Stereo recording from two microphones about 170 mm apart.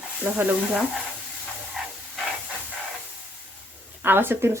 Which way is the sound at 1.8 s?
5° right (ahead or behind).